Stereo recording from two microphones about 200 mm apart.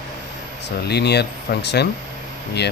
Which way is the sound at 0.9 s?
55° left (ahead or behind).